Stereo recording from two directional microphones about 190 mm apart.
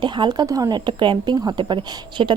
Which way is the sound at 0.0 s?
25° right (ahead or behind).